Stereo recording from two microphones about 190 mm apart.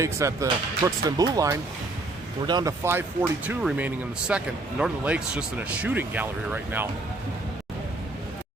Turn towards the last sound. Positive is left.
turn(degrees=-10)  # may be behind; listen again after turning